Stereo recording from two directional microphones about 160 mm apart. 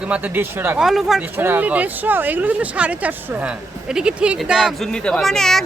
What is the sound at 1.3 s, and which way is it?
A woman's voice, 10° right (ahead or behind).